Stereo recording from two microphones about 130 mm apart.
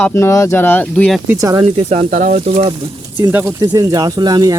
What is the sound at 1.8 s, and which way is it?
Speech, 55° right (ahead or behind).